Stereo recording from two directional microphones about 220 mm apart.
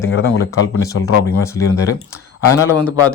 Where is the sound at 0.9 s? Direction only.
75° left (ahead or behind).